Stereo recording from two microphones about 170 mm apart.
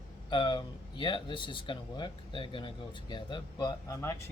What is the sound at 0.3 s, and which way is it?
Speech, 25° left (ahead or behind).